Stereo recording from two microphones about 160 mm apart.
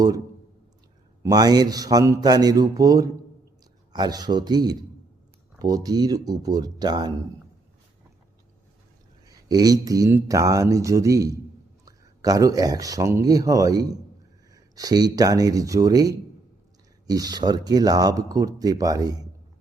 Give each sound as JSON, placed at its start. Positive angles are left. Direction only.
{"t": 1.2, "sound": "speech", "side_deg": -25}
{"t": 9.2, "sound": "speech", "side_deg": -25}